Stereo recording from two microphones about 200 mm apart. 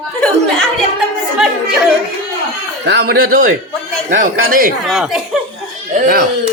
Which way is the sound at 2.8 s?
55° right (ahead or behind).